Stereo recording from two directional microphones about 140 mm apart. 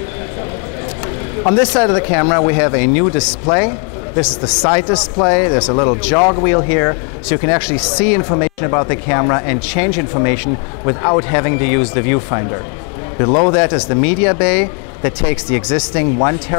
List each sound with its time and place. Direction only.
1.4 s speech: 15° left (ahead or behind)